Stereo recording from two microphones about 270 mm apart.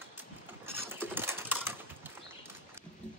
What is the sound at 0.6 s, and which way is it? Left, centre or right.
Typing, centre.